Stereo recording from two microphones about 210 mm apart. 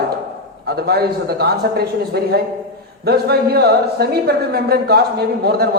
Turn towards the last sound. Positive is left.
turn(degrees=-50)  # may be behind; listen again after turning